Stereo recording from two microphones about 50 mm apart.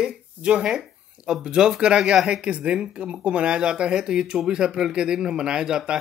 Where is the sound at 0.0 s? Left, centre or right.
Centre.